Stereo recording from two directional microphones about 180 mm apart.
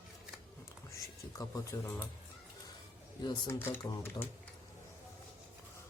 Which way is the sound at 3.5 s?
10° left (ahead or behind).